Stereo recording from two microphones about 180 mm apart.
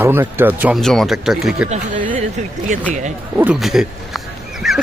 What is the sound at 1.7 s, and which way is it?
Speech, 45° right (ahead or behind).